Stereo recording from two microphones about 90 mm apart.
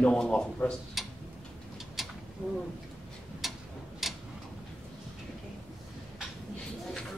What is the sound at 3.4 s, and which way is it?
Tick-tock, centre (ahead or behind).